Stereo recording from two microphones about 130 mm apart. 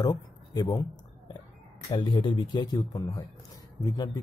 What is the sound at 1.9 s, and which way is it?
A man's voice, 35° left (ahead or behind).